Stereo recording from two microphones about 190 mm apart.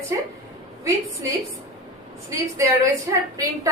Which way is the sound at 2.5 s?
15° right (ahead or behind).